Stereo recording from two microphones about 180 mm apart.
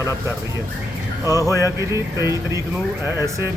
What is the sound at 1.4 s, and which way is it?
Speech, 20° left (ahead or behind).